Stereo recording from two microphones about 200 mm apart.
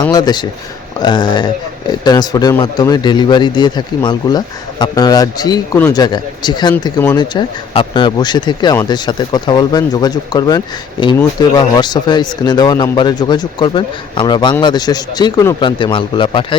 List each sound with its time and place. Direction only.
0.0 s a man's voice: 20° left (ahead or behind)